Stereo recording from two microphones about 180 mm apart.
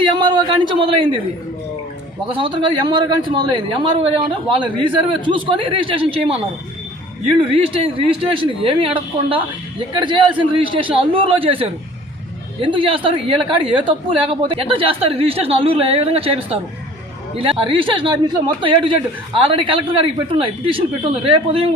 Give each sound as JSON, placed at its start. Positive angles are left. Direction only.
{"t": 0.2, "sound": "a man's voice", "side_deg": -25}
{"t": 2.2, "sound": "a man's voice", "side_deg": -30}
{"t": 7.3, "sound": "a woman's voice", "side_deg": -30}